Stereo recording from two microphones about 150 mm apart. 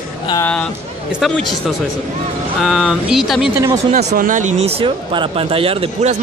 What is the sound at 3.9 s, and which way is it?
Speech, 50° right (ahead or behind).